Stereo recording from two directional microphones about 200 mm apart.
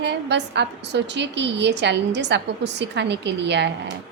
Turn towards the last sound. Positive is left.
turn(degrees=-60)  # may be behind; listen again after turning